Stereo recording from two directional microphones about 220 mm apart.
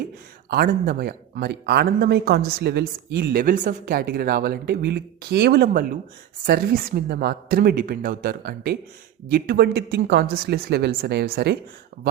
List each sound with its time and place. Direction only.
0.5 s speech: 45° right (ahead or behind)